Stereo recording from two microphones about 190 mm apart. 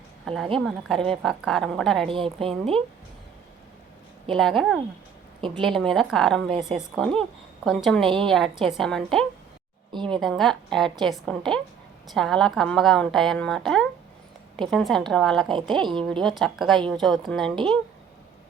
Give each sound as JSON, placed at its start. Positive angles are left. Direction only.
{"t": 0.6, "sound": "speech", "side_deg": 0}
{"t": 2.0, "sound": "a woman's voice", "side_deg": -30}
{"t": 4.3, "sound": "a woman's voice", "side_deg": 0}
{"t": 8.0, "sound": "a woman's voice", "side_deg": -25}
{"t": 8.3, "sound": "speech", "side_deg": 0}
{"t": 9.9, "sound": "speech", "side_deg": -25}
{"t": 10.2, "sound": "speech", "side_deg": 0}
{"t": 15.8, "sound": "a woman's voice", "side_deg": -25}
{"t": 16.2, "sound": "speech", "side_deg": 0}